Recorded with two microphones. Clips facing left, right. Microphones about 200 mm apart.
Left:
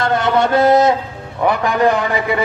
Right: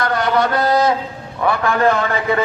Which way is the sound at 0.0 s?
25° left (ahead or behind).